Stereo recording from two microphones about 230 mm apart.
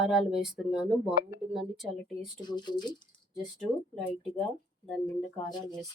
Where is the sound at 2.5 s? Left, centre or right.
Centre.